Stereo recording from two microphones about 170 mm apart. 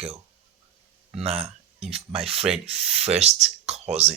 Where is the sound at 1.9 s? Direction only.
35° right (ahead or behind).